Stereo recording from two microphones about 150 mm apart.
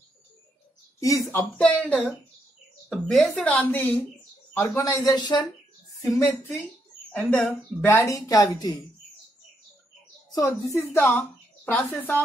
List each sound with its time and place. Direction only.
0.9 s speech: 20° left (ahead or behind)
1.6 s a woman's voice: 10° left (ahead or behind); by 5.5 s 30° left (ahead or behind)
6.0 s a woman's voice: 10° left (ahead or behind)
10.3 s a woman's voice: 20° left (ahead or behind)
11.1 s speech: 5° left (ahead or behind)